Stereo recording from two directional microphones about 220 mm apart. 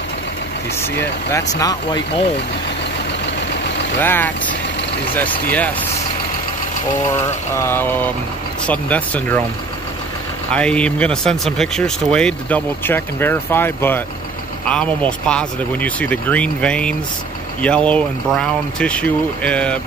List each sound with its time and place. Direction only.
1.6 s speech: 20° left (ahead or behind)
4.0 s speech: 10° left (ahead or behind)
7.5 s speech: 10° left (ahead or behind)
10.5 s speech: 5° left (ahead or behind)